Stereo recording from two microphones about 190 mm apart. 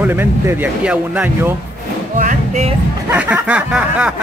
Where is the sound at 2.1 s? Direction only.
40° right (ahead or behind).